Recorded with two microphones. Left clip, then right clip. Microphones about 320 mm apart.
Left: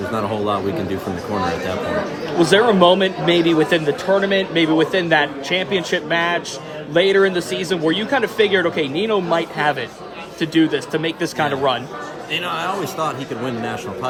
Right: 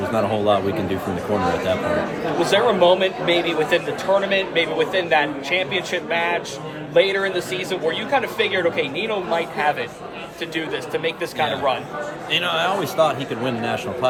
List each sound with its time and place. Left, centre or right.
0.2 s a man's voice: centre
2.4 s a man's voice: left
12.4 s a man's voice: centre